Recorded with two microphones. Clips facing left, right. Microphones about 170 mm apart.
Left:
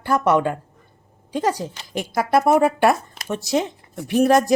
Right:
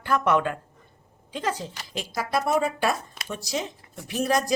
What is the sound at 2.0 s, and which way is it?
Speech, 55° left (ahead or behind).